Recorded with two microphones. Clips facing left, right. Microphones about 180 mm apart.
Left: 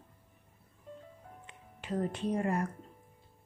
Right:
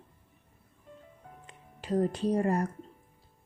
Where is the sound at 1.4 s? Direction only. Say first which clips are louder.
Right 6 dB; 35° right (ahead or behind).